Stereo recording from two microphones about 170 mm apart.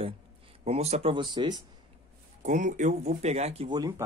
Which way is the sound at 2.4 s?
45° right (ahead or behind).